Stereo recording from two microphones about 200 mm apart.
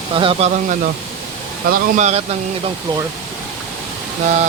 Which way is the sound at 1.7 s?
35° right (ahead or behind).